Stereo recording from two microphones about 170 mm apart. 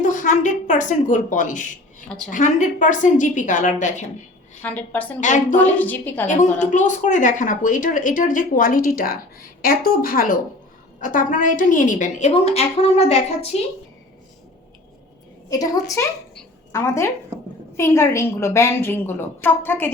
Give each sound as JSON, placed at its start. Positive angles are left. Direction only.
{"t": 0.0, "sound": "a woman's voice", "side_deg": 50}
{"t": 2.0, "sound": "a woman's voice", "side_deg": 5}
{"t": 2.3, "sound": "speech", "side_deg": 45}
{"t": 4.6, "sound": "a woman's voice", "side_deg": 10}
{"t": 5.2, "sound": "speech", "side_deg": 45}
{"t": 5.5, "sound": "a woman's voice", "side_deg": 10}
{"t": 6.2, "sound": "a woman's voice", "side_deg": 45}
{"t": 15.4, "sound": "a woman's voice", "side_deg": 20}